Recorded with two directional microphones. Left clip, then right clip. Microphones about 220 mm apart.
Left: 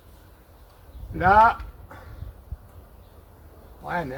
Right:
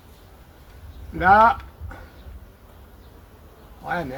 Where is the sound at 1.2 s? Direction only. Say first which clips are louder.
Right 2 dB; 10° left (ahead or behind).